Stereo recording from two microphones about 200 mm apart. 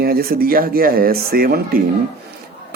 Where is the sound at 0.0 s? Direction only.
50° right (ahead or behind).